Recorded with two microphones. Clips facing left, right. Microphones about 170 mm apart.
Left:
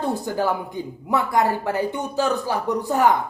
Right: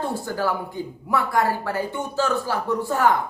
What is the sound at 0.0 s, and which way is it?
Speech, 20° left (ahead or behind).